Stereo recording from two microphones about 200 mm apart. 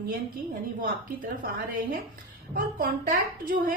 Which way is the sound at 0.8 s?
45° right (ahead or behind).